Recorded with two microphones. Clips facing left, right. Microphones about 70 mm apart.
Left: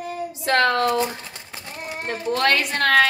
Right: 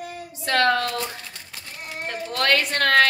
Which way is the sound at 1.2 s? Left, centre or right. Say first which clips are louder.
Left 3 dB; left.